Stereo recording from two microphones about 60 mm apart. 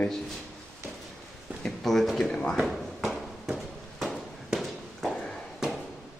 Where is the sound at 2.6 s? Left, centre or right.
Centre.